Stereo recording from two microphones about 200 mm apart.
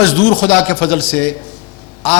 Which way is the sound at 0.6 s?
15° left (ahead or behind).